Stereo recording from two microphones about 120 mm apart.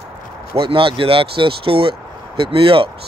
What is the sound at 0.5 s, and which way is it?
Speech, 45° right (ahead or behind).